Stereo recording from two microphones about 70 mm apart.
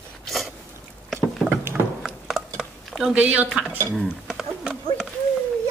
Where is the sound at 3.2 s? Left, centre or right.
Centre.